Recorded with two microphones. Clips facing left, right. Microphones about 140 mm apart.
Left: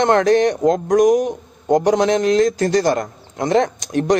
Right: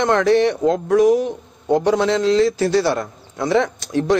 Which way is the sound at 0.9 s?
15° left (ahead or behind).